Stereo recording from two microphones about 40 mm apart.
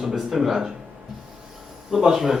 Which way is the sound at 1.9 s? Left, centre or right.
Centre.